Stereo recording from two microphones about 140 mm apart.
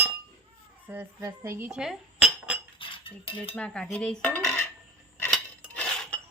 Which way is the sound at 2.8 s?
40° left (ahead or behind).